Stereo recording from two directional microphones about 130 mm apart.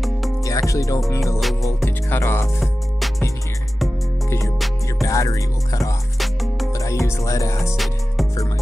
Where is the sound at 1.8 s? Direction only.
20° left (ahead or behind).